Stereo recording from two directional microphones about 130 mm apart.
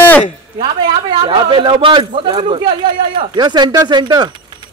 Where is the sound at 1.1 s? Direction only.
40° right (ahead or behind).